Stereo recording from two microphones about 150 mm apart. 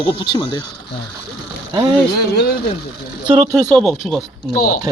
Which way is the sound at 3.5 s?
5° left (ahead or behind).